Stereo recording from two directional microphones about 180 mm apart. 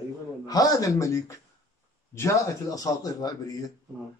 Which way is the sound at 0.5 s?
20° left (ahead or behind).